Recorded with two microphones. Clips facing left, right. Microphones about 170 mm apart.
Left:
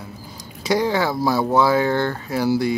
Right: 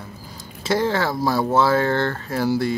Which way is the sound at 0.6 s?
15° left (ahead or behind).